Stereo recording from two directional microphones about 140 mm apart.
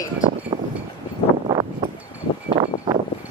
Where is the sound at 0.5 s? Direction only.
30° right (ahead or behind).